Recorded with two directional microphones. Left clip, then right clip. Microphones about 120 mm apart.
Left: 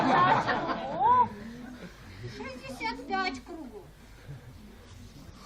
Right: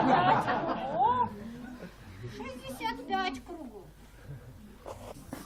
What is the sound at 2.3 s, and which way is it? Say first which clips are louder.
Speech: left 1 dB; 5° right (ahead or behind).